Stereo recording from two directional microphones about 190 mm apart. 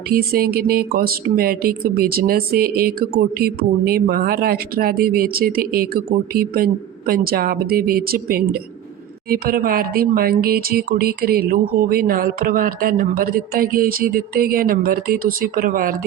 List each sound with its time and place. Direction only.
0.1 s speech: 50° right (ahead or behind)